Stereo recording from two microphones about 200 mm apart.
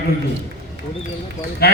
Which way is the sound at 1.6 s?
50° left (ahead or behind).